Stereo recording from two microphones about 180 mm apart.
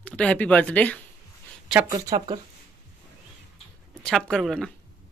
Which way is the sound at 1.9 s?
20° right (ahead or behind).